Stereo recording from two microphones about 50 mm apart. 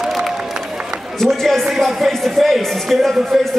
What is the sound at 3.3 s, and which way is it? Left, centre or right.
Speech, centre.